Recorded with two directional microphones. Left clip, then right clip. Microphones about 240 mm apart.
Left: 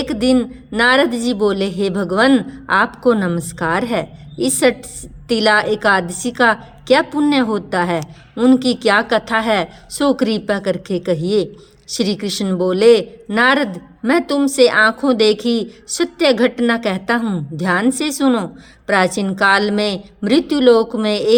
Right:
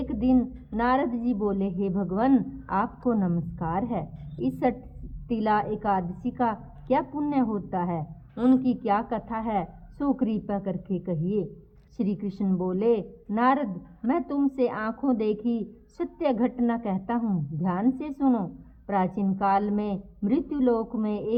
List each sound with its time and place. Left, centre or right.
0.0 s speech: centre
1.9 s speech: left
2.1 s speech: centre
5.3 s speech: centre